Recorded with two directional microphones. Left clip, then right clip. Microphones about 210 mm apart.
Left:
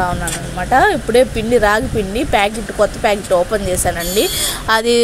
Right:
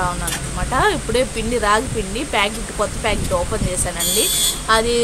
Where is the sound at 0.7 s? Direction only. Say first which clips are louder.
Left 6 dB; 20° left (ahead or behind).